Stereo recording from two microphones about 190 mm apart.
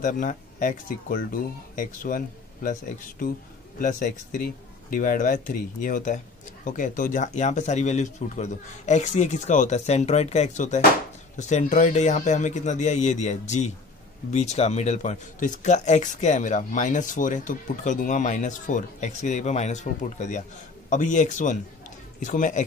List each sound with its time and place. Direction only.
0.0 s speech: 45° left (ahead or behind)